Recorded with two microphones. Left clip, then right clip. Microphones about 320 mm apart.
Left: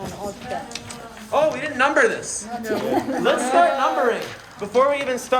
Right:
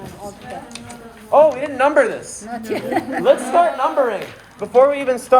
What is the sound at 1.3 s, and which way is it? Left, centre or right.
A man's voice, centre.